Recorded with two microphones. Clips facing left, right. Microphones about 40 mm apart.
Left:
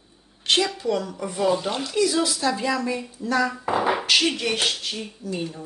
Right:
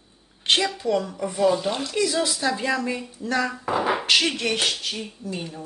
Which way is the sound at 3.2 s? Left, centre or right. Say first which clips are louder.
Left 2 dB; right.